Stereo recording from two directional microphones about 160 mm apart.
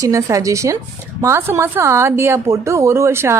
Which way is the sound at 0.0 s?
20° right (ahead or behind).